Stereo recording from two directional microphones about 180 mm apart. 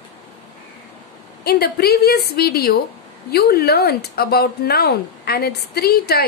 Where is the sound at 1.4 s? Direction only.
60° left (ahead or behind).